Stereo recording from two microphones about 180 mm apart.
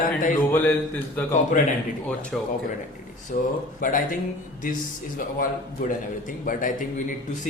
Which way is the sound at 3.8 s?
50° left (ahead or behind).